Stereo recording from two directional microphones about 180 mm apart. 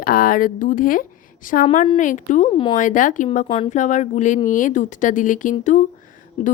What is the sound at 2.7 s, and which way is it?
A woman's voice, 45° left (ahead or behind).